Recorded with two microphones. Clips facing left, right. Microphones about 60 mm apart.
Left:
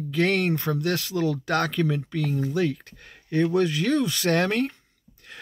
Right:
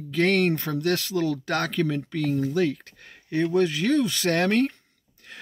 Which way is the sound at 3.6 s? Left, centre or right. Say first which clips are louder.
Even; right.